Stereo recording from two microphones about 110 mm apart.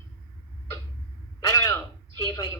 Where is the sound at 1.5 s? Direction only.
30° left (ahead or behind).